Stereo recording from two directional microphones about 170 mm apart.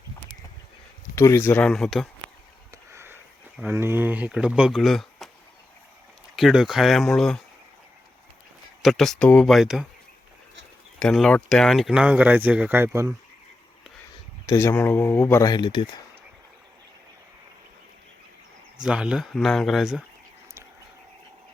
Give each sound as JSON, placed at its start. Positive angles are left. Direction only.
{"t": 1.1, "sound": "speech", "side_deg": 15}
{"t": 2.9, "sound": "sniff", "side_deg": -15}
{"t": 3.6, "sound": "speech", "side_deg": -10}
{"t": 6.3, "sound": "speech", "side_deg": 0}
{"t": 8.8, "sound": "speech", "side_deg": 0}
{"t": 11.0, "sound": "speech", "side_deg": 5}
{"t": 14.4, "sound": "speech", "side_deg": 15}
{"t": 18.8, "sound": "speech", "side_deg": -5}